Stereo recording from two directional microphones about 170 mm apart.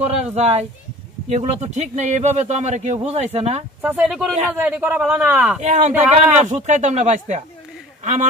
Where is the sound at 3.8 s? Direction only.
5° right (ahead or behind).